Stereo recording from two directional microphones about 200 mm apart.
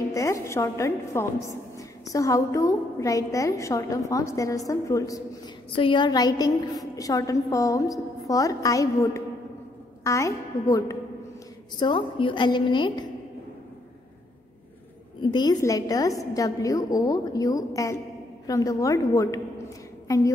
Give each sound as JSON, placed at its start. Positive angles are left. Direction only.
{"t": 0.1, "sound": "a woman's voice", "side_deg": 15}
{"t": 15.3, "sound": "a woman's voice", "side_deg": 20}